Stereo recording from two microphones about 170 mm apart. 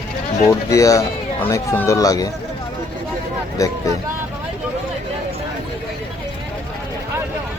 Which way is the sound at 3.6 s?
20° left (ahead or behind).